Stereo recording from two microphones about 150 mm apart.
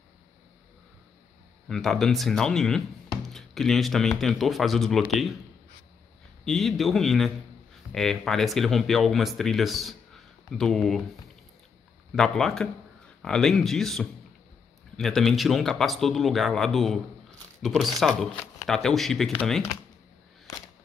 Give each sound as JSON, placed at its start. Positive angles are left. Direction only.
{"t": 1.7, "sound": "speech", "side_deg": 0}
{"t": 6.4, "sound": "speech", "side_deg": 0}
{"t": 12.2, "sound": "speech", "side_deg": 0}
{"t": 20.5, "sound": "a sound", "side_deg": 20}